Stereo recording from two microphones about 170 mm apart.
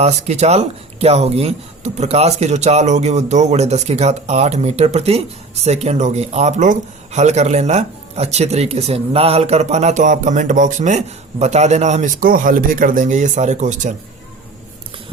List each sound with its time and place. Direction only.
0.0 s speech: 40° right (ahead or behind)